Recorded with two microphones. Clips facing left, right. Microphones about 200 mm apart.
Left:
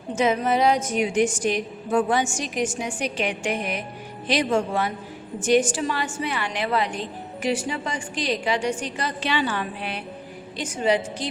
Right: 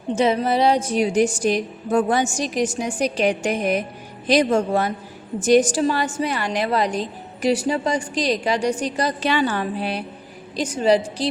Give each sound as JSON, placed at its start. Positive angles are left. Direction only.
{"t": 0.1, "sound": "a woman's voice", "side_deg": -30}